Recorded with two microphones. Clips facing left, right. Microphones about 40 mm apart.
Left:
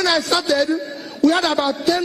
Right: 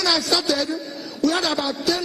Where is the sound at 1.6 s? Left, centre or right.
Centre.